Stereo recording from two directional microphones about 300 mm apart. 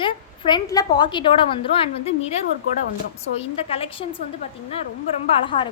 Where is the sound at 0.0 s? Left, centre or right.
Centre.